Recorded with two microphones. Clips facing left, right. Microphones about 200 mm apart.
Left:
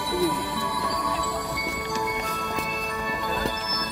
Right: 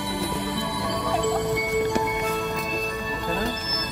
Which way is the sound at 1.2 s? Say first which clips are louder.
Right 7 dB; 25° right (ahead or behind).